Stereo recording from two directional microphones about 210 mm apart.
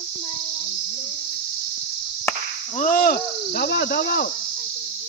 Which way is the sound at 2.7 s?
40° left (ahead or behind).